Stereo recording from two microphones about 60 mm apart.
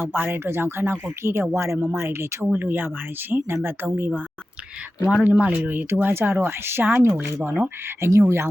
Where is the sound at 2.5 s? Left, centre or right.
Right.